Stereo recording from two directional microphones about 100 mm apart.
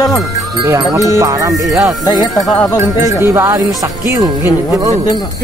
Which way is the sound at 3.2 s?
25° right (ahead or behind).